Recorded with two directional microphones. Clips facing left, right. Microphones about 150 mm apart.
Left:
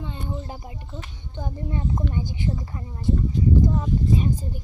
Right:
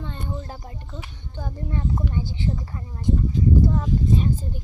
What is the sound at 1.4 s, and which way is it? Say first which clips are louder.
Speech: even; 15° left (ahead or behind).